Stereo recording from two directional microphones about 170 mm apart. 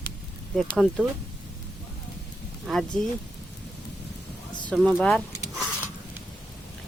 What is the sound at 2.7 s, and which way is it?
Speech, centre (ahead or behind).